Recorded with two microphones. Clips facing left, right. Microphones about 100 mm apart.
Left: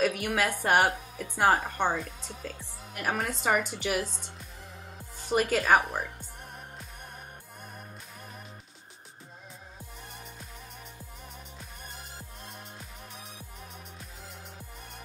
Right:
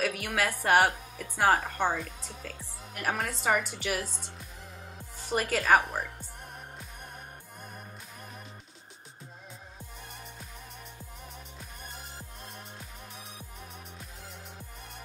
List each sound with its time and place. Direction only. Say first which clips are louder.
0.0 s a woman's voice: left 3 dB; 10° left (ahead or behind)
3.4 s a woman's voice: left 1 dB; 20° left (ahead or behind)
5.3 s speech: left 4 dB; 15° left (ahead or behind)
5.7 s speech: right 2 dB; centre (ahead or behind)